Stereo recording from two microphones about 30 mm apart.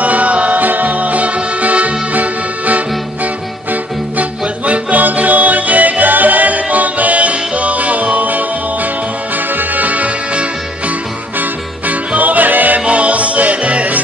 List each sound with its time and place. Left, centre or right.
0.0 s music: right
4.2 s music: right
9.6 s music: right
12.2 s music: right
12.8 s music: right